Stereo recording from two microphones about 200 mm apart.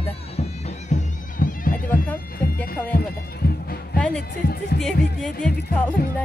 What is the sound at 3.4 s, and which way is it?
Music, 50° left (ahead or behind).